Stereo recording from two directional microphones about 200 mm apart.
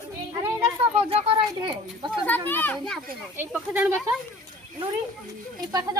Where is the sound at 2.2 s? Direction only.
10° left (ahead or behind).